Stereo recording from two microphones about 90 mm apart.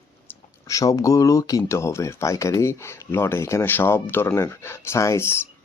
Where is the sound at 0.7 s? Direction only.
40° left (ahead or behind).